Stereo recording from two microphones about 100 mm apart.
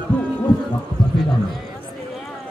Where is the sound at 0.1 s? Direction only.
15° left (ahead or behind).